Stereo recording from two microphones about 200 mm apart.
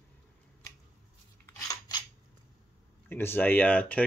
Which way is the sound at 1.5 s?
15° left (ahead or behind).